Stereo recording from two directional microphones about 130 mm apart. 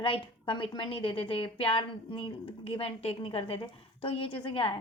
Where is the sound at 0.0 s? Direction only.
45° left (ahead or behind).